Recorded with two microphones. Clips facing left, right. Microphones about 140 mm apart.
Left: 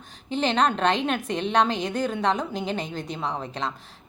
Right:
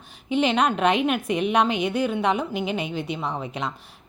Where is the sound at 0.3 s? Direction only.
10° right (ahead or behind).